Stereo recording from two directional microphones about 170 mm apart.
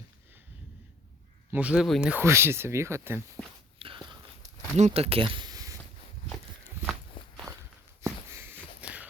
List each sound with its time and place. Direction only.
1.5 s speech: 10° right (ahead or behind)
3.8 s whispering: 30° right (ahead or behind)
4.8 s speech: 35° right (ahead or behind)
6.8 s walk: 15° right (ahead or behind)
7.2 s walk: 30° left (ahead or behind)
8.3 s a sound: 15° right (ahead or behind)